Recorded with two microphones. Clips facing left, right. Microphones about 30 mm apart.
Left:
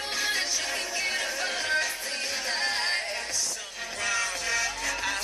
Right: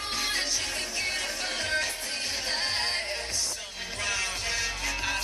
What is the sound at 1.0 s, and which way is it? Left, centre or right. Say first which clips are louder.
Music: left 2 dB; centre.